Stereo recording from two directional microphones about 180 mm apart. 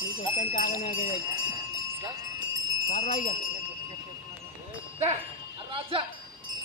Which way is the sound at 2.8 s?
40° left (ahead or behind).